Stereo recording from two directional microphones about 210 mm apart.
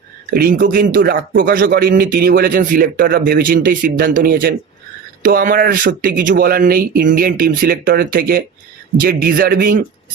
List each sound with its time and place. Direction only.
0.3 s a man's voice: 45° right (ahead or behind)